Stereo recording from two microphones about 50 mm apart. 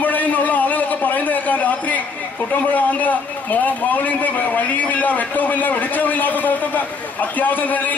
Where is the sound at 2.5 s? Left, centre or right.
Left.